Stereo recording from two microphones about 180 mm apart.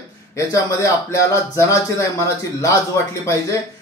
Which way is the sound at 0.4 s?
15° left (ahead or behind).